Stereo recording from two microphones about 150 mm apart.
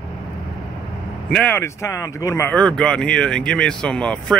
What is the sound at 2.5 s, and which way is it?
Speech, 5° left (ahead or behind).